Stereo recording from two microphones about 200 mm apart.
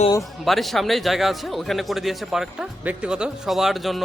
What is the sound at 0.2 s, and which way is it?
Speech, centre (ahead or behind).